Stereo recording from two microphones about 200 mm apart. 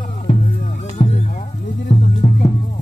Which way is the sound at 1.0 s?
30° left (ahead or behind).